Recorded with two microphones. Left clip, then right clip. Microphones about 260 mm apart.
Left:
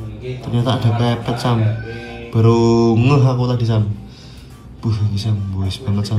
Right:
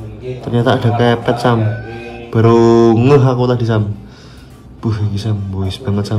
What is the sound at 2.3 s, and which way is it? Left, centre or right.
Music, left.